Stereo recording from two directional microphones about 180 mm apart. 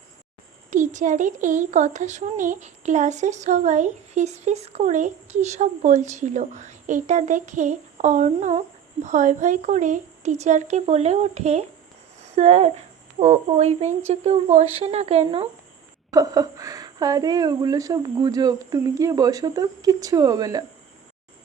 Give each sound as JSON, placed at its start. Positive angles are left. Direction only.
{"t": 0.7, "sound": "speech", "side_deg": -45}
{"t": 16.1, "sound": "a woman's voice", "side_deg": -20}